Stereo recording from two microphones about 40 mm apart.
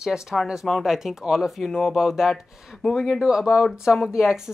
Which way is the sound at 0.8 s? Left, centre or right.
Centre.